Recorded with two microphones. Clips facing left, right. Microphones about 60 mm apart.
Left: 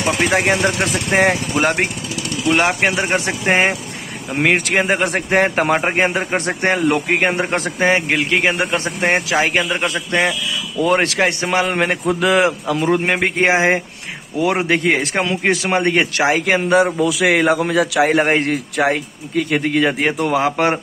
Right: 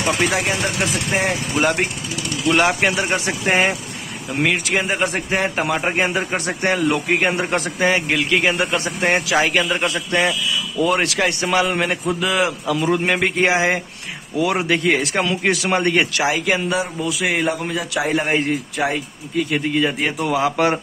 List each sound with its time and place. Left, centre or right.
0.1 s a man's voice: left
0.7 s speech: left
1.5 s a man's voice: left
2.8 s a man's voice: left
4.4 s a man's voice: left
5.9 s a man's voice: left
10.8 s a man's voice: left
11.6 s a man's voice: left
12.6 s a man's voice: left
17.0 s a man's voice: left
18.1 s a man's voice: left